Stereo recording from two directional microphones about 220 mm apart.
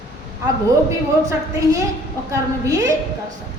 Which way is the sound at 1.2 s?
15° right (ahead or behind).